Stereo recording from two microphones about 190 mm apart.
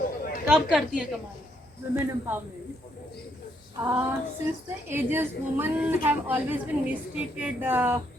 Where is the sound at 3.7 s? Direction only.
5° right (ahead or behind).